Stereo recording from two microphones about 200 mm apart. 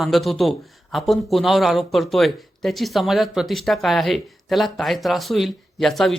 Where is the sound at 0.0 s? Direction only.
Centre (ahead or behind).